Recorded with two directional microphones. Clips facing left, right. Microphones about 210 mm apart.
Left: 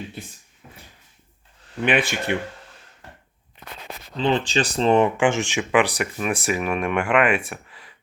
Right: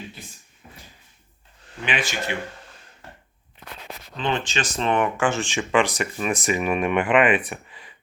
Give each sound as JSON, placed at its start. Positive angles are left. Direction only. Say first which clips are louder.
{"t": 1.8, "sound": "speech", "louder": "left 6 dB", "side_deg": 55}
{"t": 4.2, "sound": "speech", "louder": "left 5 dB", "side_deg": 35}
{"t": 5.1, "sound": "speech", "louder": "left 3 dB", "side_deg": 15}